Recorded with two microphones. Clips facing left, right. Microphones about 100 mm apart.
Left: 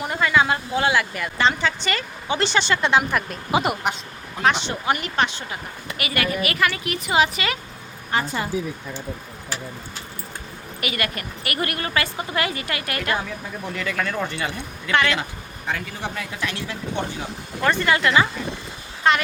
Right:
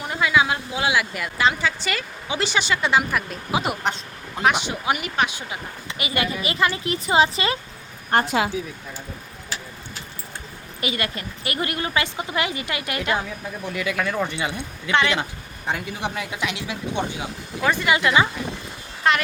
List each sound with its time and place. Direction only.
0.0 s a man's voice: centre (ahead or behind)
4.4 s speech: 10° right (ahead or behind)
6.0 s a woman's voice: 25° right (ahead or behind)
8.1 s speech: 75° right (ahead or behind)
10.8 s a woman's voice: 25° right (ahead or behind)
19.1 s speech: centre (ahead or behind)